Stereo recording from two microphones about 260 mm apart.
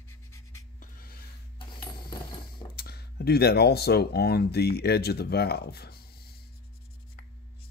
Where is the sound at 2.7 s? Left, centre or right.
Left.